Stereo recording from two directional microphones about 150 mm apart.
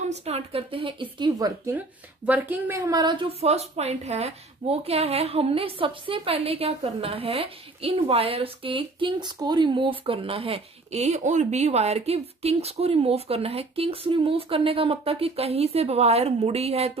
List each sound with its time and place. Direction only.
0.0 s a woman's voice: 45° right (ahead or behind)
1.7 s a woman's voice: 15° right (ahead or behind)
3.3 s a woman's voice: 45° right (ahead or behind)